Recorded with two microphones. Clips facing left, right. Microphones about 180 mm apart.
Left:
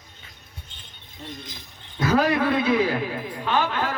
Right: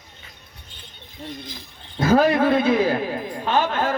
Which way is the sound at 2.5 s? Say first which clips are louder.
Right 3 dB; 45° right (ahead or behind).